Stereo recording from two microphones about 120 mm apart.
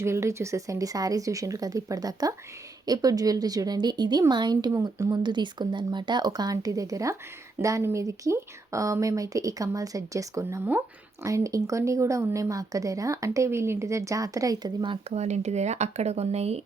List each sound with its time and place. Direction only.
0.0 s speech: 25° right (ahead or behind)
4.7 s speech: 25° right (ahead or behind)
5.2 s speech: 40° right (ahead or behind)
15.1 s speech: 70° right (ahead or behind)